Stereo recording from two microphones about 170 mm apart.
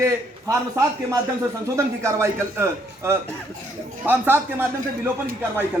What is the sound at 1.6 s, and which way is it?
A man's voice, 15° right (ahead or behind).